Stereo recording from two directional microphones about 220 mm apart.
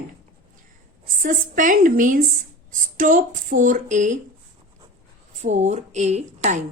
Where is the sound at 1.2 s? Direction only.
35° right (ahead or behind).